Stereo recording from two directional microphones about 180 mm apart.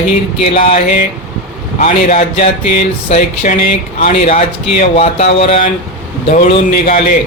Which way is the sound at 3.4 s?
45° left (ahead or behind).